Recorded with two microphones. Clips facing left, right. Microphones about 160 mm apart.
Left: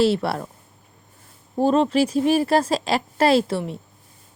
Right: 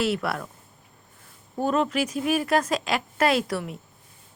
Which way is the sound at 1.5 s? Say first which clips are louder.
Left 6 dB; 30° left (ahead or behind).